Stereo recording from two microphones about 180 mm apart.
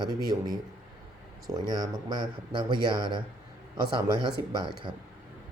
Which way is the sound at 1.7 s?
25° right (ahead or behind).